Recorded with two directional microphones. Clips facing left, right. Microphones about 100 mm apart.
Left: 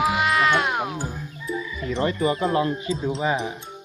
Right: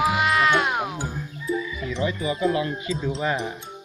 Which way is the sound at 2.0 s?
50° left (ahead or behind).